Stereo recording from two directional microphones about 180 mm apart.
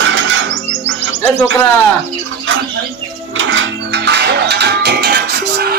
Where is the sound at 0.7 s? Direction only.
90° right.